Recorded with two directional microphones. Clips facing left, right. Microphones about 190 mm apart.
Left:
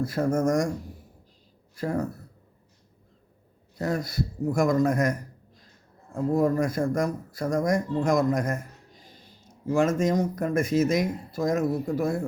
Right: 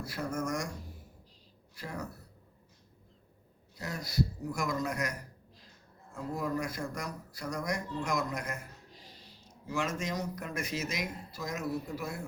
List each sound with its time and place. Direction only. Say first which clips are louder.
0.0 s speech: left 11 dB; 50° left (ahead or behind)
1.7 s speech: left 13 dB; 50° left (ahead or behind)
3.8 s speech: left 6 dB; 55° left (ahead or behind)
6.1 s speech: left 11 dB; 50° left (ahead or behind)